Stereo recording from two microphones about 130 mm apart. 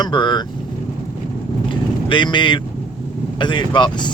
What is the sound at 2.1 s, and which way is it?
Speech, 35° left (ahead or behind).